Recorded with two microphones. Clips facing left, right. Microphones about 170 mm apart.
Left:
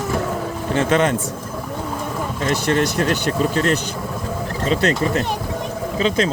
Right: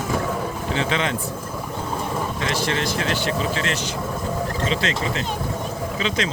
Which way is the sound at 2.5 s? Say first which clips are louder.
Left 7 dB; 50° left (ahead or behind).